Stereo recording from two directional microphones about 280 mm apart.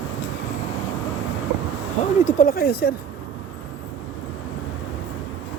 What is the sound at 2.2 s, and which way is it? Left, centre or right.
Speech, left.